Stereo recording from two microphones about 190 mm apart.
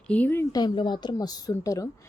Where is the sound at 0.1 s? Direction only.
10° left (ahead or behind).